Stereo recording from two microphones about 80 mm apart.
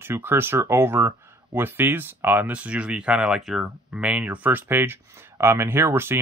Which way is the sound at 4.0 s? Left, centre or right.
Centre.